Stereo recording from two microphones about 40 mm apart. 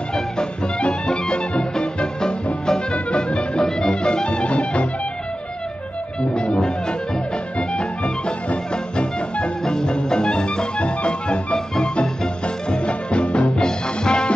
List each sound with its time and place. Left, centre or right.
0.1 s music: left
6.3 s music: left